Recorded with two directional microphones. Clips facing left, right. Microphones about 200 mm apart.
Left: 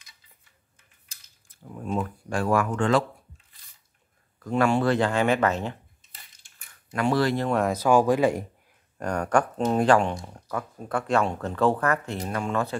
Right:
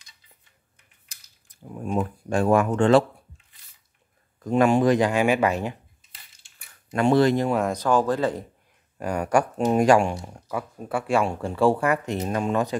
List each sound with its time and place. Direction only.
1.5 s speech: 15° right (ahead or behind)
4.4 s speech: 20° right (ahead or behind)
6.9 s speech: 20° right (ahead or behind)
7.4 s speech: centre (ahead or behind)
8.9 s speech: 10° right (ahead or behind)